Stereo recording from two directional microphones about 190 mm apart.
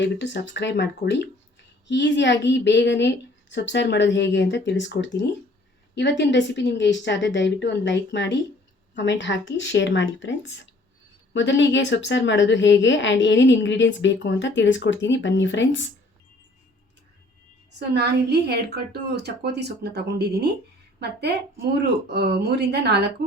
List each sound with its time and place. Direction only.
0.0 s a woman's voice: 65° left (ahead or behind)
17.7 s a woman's voice: 60° right (ahead or behind)